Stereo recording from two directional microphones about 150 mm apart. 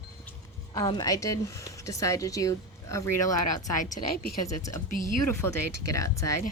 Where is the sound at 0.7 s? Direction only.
30° left (ahead or behind).